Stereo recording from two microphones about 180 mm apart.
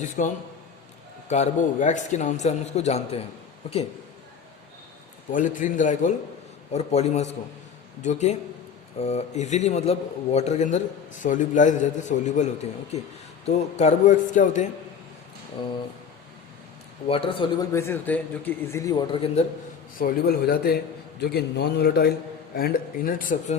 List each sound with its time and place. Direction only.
0.2 s a man's voice: 45° left (ahead or behind)
5.3 s a man's voice: 45° left (ahead or behind)
17.1 s a man's voice: 30° left (ahead or behind)
17.7 s a man's voice: 10° left (ahead or behind); by 19.5 s 30° left (ahead or behind)
20.0 s a man's voice: 55° left (ahead or behind)